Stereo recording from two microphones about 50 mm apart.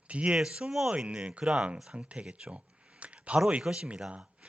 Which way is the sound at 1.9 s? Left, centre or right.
Right.